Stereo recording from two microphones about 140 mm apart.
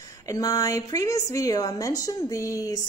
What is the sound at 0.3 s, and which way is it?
A woman's voice, 25° left (ahead or behind).